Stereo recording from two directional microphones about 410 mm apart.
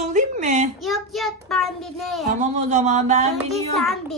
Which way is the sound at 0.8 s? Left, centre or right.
Centre.